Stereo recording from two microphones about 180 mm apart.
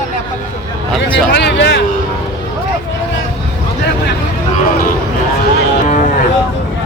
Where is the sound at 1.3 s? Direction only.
75° left (ahead or behind).